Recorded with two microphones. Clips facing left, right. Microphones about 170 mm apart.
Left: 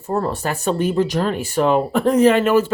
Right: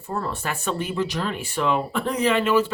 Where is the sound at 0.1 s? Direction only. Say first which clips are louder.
Left 7 dB; 40° left (ahead or behind).